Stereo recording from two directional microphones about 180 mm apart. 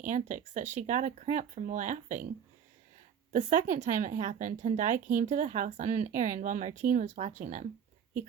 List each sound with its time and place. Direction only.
0.0 s a woman's voice: 45° right (ahead or behind)
3.3 s a woman's voice: 45° right (ahead or behind)